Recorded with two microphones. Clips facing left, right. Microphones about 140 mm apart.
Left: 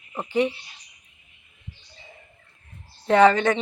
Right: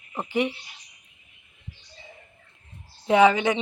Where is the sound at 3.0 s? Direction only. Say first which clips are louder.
Left 2 dB; 10° right (ahead or behind).